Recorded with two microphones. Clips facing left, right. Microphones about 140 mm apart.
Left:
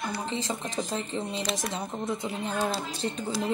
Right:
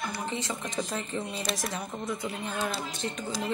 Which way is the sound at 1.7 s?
25° left (ahead or behind).